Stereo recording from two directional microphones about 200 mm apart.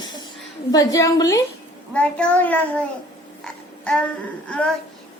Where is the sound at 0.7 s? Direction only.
20° left (ahead or behind).